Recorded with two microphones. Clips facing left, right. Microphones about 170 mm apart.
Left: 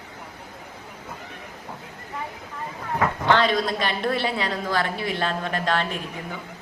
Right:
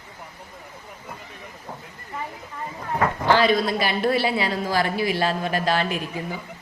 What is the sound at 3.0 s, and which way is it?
A woman's voice, 5° right (ahead or behind).